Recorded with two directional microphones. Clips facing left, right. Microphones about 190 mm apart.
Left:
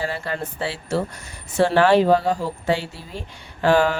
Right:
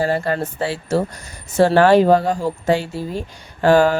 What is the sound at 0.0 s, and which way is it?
Speech, 45° right (ahead or behind).